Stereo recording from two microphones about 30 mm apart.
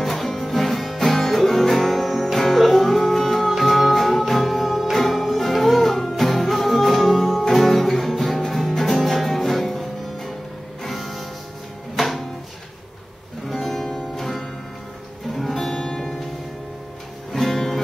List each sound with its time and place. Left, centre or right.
0.0 s music: centre
13.5 s music: centre
15.3 s music: centre
15.7 s music: left
17.3 s music: centre